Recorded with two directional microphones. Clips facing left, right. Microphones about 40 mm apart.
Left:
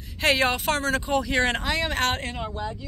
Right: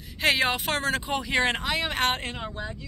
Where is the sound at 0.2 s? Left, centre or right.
Centre.